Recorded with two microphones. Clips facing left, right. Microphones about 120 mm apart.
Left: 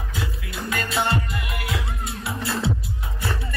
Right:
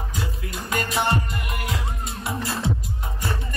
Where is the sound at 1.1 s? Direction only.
45° right (ahead or behind).